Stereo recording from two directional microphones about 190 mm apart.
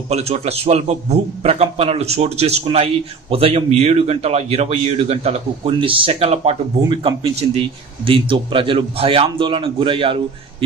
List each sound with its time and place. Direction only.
0.1 s a man's voice: 35° right (ahead or behind)